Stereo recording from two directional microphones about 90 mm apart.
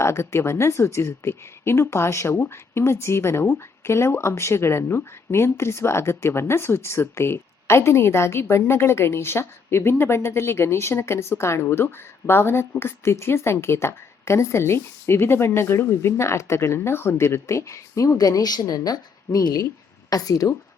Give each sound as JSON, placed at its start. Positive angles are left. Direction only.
{"t": 0.0, "sound": "a woman's voice", "side_deg": 30}